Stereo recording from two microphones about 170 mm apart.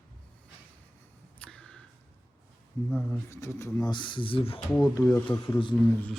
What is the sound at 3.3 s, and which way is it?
Speech, 15° left (ahead or behind).